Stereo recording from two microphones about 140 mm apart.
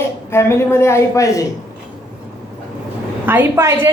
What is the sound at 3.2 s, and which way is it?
Speech, 15° right (ahead or behind).